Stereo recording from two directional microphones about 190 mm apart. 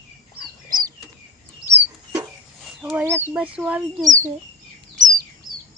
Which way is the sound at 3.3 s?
5° right (ahead or behind).